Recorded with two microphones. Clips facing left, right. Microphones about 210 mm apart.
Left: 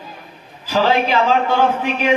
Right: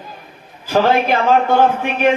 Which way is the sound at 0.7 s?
55° right (ahead or behind).